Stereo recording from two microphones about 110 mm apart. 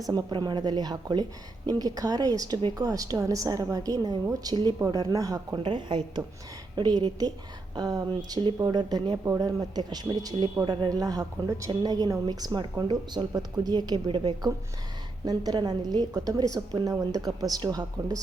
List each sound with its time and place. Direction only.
0.0 s a woman's voice: 35° right (ahead or behind)
5.6 s a woman's voice: 45° right (ahead or behind)
11.7 s a woman's voice: 40° right (ahead or behind)
15.2 s a woman's voice: 35° right (ahead or behind)